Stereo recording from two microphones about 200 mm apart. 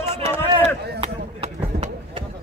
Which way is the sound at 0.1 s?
30° right (ahead or behind).